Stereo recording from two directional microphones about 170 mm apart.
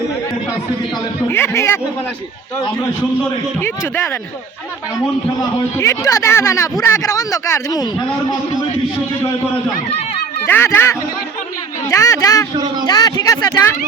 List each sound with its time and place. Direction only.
1.3 s speech: 15° left (ahead or behind)
3.6 s speech: 15° left (ahead or behind)
5.7 s speech: 15° left (ahead or behind)
10.4 s speech: 15° left (ahead or behind)